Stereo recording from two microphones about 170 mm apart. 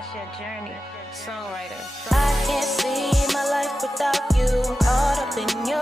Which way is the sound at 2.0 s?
Centre (ahead or behind).